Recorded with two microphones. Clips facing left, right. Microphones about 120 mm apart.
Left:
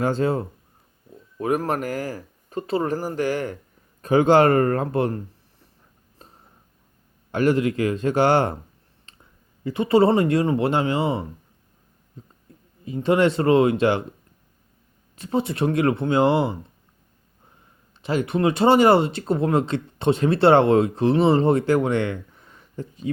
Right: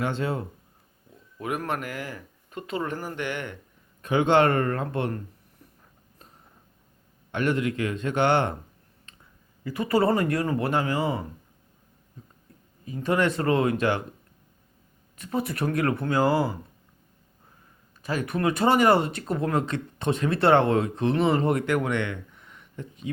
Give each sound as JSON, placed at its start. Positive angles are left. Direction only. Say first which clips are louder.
{"t": 0.0, "sound": "speech", "louder": "left 6 dB", "side_deg": 40}
{"t": 7.3, "sound": "speech", "louder": "left 6 dB", "side_deg": 35}
{"t": 9.1, "sound": "a sound", "louder": "left 2 dB", "side_deg": 30}
{"t": 9.6, "sound": "speech", "louder": "left 5 dB", "side_deg": 25}
{"t": 12.8, "sound": "speech", "louder": "left 5 dB", "side_deg": 25}
{"t": 15.2, "sound": "speech", "louder": "left 5 dB", "side_deg": 25}
{"t": 18.0, "sound": "speech", "louder": "left 5 dB", "side_deg": 30}